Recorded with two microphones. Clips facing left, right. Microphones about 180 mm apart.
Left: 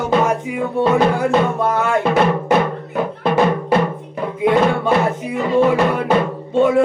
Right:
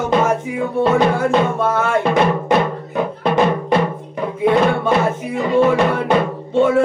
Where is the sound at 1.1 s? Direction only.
15° left (ahead or behind).